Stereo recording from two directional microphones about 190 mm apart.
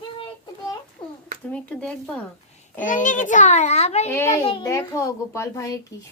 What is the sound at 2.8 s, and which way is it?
A child's voice, 45° left (ahead or behind).